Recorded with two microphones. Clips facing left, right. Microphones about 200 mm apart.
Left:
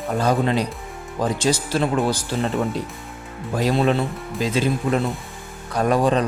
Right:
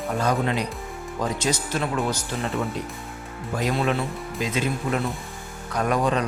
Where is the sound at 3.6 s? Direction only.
35° left (ahead or behind).